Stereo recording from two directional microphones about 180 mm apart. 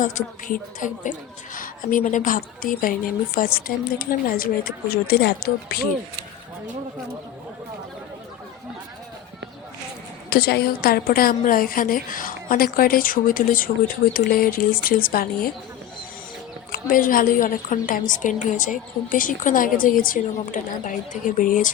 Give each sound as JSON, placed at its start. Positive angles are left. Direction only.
{"t": 0.0, "sound": "a woman's voice", "side_deg": 45}
{"t": 10.2, "sound": "a woman's voice", "side_deg": 60}
{"t": 16.7, "sound": "a woman's voice", "side_deg": 50}